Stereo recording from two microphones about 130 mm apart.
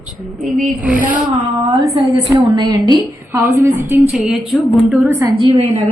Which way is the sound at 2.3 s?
30° right (ahead or behind).